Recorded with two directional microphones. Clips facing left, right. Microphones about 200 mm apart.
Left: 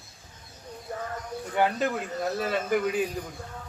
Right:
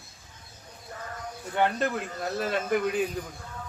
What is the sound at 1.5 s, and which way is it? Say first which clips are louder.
Speech: left 1 dB; 5° left (ahead or behind).